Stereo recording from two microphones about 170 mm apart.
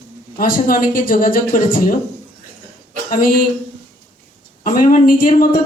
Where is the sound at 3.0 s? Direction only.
55° left (ahead or behind).